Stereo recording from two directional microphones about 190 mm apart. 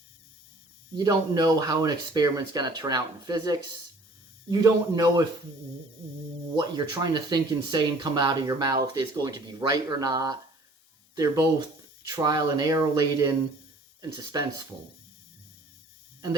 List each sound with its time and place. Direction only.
0.9 s speech: 20° right (ahead or behind)
6.6 s speech: 20° right (ahead or behind)